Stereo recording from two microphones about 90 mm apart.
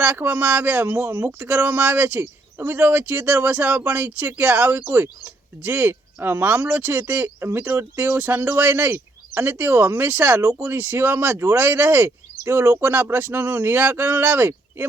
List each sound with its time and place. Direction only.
0.0 s speech: 20° right (ahead or behind)